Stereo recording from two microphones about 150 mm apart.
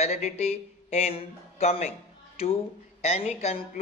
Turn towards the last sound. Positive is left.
turn(degrees=45)  # may be behind; listen again after turning